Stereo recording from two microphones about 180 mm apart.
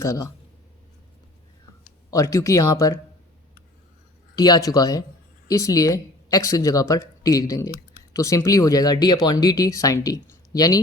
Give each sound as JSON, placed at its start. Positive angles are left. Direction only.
{"t": 0.0, "sound": "speech", "side_deg": 15}
{"t": 2.0, "sound": "speech", "side_deg": 20}
{"t": 4.4, "sound": "speech", "side_deg": 20}